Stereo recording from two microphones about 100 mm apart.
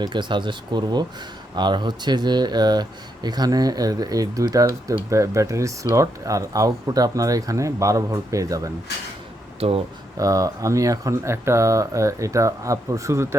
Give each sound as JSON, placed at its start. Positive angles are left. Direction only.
{"t": 0.0, "sound": "speech", "side_deg": -50}
{"t": 9.6, "sound": "speech", "side_deg": -80}
{"t": 10.2, "sound": "speech", "side_deg": -35}